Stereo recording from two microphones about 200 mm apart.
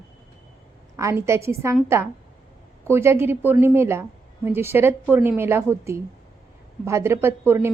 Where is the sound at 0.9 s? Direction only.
15° right (ahead or behind).